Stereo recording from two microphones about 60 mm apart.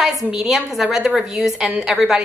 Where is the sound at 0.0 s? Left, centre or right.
Centre.